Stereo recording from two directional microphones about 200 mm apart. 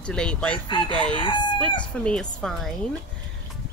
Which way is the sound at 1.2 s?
20° left (ahead or behind).